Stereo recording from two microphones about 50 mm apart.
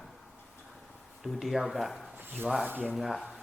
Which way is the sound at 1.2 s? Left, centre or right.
Centre.